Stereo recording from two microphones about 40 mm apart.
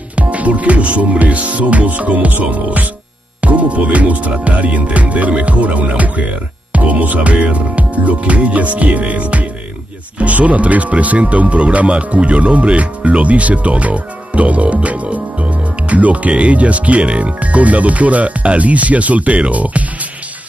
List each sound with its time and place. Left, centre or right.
0.1 s music: right
2.3 s speech: right
6.7 s music: right
10.1 s speech: right